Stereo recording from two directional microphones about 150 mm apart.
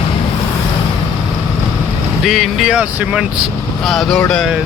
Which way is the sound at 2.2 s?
Centre (ahead or behind).